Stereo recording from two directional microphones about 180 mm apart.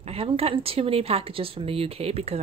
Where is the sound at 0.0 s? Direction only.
35° right (ahead or behind).